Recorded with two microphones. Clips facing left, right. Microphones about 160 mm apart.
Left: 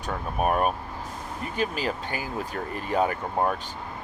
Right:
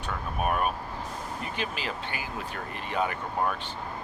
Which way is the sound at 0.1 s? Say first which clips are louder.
Left 4 dB; 40° left (ahead or behind).